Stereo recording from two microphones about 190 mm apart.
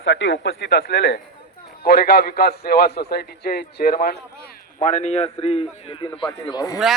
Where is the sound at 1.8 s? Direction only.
55° left (ahead or behind).